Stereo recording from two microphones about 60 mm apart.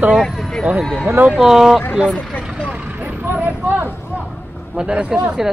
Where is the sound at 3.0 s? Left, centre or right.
Right.